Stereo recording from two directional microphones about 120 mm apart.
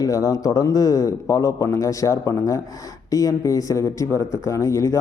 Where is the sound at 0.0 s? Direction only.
25° left (ahead or behind).